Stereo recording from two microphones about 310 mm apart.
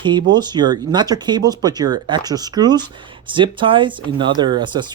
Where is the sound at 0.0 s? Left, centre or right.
Centre.